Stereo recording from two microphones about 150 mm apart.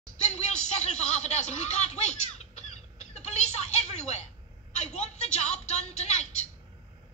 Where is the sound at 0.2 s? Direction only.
50° left (ahead or behind).